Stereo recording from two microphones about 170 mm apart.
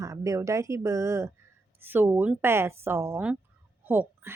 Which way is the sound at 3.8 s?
10° right (ahead or behind).